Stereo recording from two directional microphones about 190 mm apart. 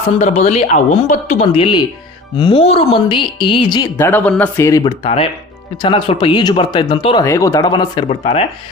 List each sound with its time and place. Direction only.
0.2 s speech: 35° left (ahead or behind)
3.9 s speech: 10° left (ahead or behind)
4.8 s speech: 30° left (ahead or behind)